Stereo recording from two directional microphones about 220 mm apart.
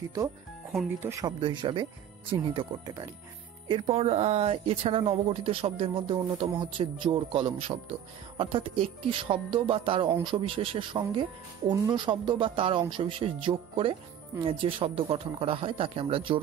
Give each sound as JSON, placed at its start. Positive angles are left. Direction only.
{"t": 1.0, "sound": "speech", "side_deg": -15}